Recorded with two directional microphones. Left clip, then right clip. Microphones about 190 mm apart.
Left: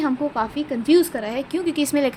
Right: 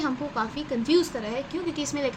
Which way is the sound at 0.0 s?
45° left (ahead or behind).